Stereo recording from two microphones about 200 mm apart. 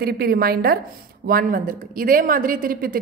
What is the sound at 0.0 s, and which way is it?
A woman's voice, 50° right (ahead or behind).